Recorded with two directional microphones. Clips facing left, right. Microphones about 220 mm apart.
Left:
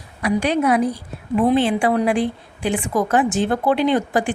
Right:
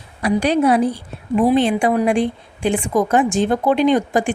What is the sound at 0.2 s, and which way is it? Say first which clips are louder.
A woman's voice: right 3 dB; 35° right (ahead or behind).